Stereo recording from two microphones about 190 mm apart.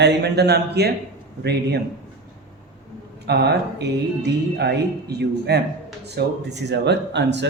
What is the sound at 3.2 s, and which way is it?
Speech, 60° right (ahead or behind).